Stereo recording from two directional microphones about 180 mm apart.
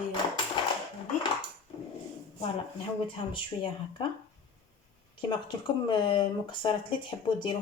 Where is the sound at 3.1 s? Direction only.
30° left (ahead or behind).